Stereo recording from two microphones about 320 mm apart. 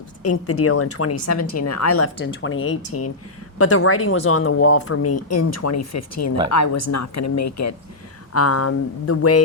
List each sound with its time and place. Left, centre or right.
0.2 s speech: left
2.2 s speech: left